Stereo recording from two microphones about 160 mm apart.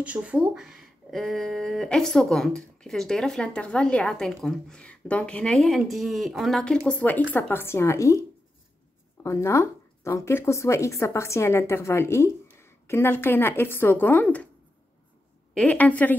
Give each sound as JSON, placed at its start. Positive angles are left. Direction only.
{"t": 0.0, "sound": "speech", "side_deg": -10}
{"t": 9.2, "sound": "speech", "side_deg": 20}
{"t": 15.5, "sound": "speech", "side_deg": 10}